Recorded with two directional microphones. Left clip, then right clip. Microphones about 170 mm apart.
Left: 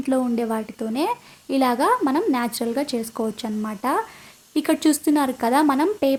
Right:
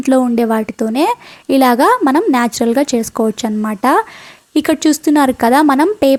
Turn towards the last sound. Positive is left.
turn(degrees=-40)  # may be behind; listen again after turning